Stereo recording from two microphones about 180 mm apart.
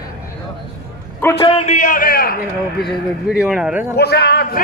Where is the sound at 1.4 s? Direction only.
30° left (ahead or behind); by 2.3 s 55° left (ahead or behind).